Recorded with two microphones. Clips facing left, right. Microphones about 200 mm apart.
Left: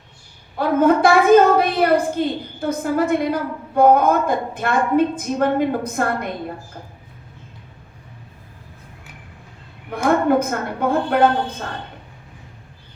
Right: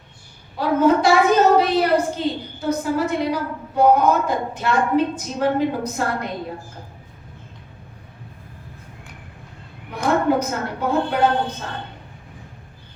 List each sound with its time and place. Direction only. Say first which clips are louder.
0.6 s a woman's voice: left 1 dB; 55° left (ahead or behind)
9.9 s a woman's voice: left 2 dB; 55° left (ahead or behind)